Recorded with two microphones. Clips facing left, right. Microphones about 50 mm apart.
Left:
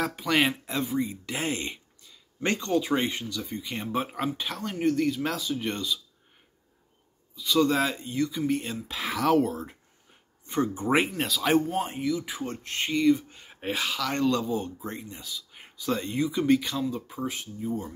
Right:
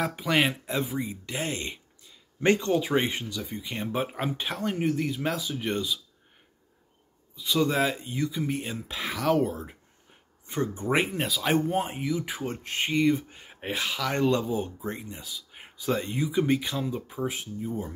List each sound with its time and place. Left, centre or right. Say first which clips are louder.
0.0 s speech: even; centre
1.4 s speech: left 2 dB; centre
2.0 s speech: right 5 dB; centre
3.4 s speech: even; centre
4.2 s speech: right 1 dB; centre
7.5 s speech: left 1 dB; centre
10.6 s speech: left 2 dB; centre
11.1 s speech: left 2 dB; centre
12.0 s speech: left 1 dB; right; by 17.9 s centre